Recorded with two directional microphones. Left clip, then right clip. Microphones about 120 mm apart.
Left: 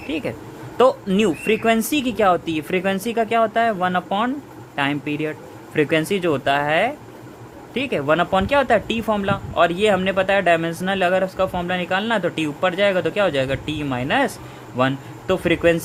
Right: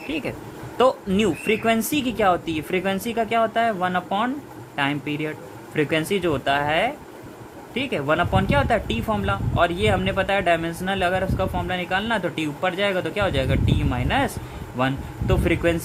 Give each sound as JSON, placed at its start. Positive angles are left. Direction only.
{"t": 0.1, "sound": "speech", "side_deg": 45}